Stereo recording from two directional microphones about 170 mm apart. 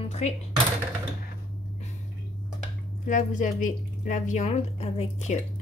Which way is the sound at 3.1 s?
50° left (ahead or behind).